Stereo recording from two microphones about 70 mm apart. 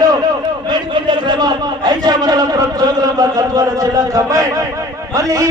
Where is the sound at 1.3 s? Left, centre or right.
Right.